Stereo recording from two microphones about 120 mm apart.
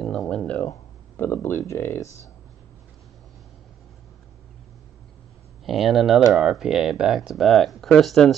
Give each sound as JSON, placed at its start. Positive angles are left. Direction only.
{"t": 0.0, "sound": "a sound", "side_deg": 5}
{"t": 1.1, "sound": "speech", "side_deg": 20}
{"t": 5.7, "sound": "speech", "side_deg": 0}